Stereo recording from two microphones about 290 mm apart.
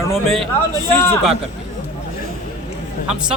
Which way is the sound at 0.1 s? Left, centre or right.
Centre.